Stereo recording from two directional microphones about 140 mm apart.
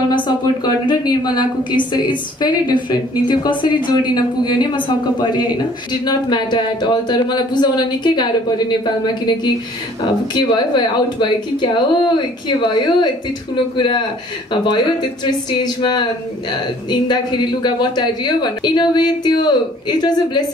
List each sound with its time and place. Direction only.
0.7 s a woman's voice: 30° left (ahead or behind)
15.5 s a woman's voice: 30° left (ahead or behind)
17.6 s a woman's voice: 30° left (ahead or behind)